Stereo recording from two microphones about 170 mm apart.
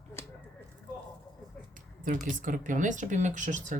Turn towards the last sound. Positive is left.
turn(degrees=-45)  # may be behind; listen again after turning